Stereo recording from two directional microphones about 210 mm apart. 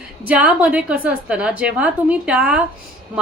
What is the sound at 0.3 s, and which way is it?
A woman's voice, 5° right (ahead or behind).